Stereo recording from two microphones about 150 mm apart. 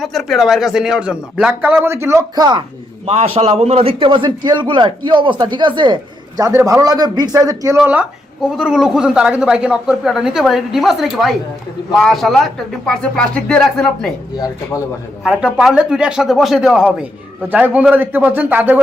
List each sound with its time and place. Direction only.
0.0 s a man's voice: centre (ahead or behind); by 2.6 s 30° right (ahead or behind)
3.1 s a man's voice: 40° right (ahead or behind); by 7.8 s 20° right (ahead or behind)
7.8 s a man's voice: 10° right (ahead or behind)
14.3 s speech: 25° left (ahead or behind)
15.2 s a man's voice: 5° right (ahead or behind)